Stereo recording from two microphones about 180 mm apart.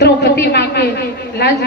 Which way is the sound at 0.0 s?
65° left (ahead or behind).